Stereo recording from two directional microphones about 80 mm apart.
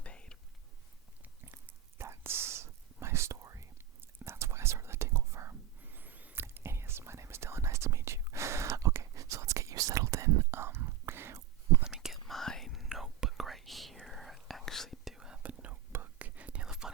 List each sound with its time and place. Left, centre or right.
0.0 s whispering: centre
1.2 s whispering: right
5.8 s a sound: right
6.4 s whispering: right
11.8 s whispering: centre
15.6 s whispering: right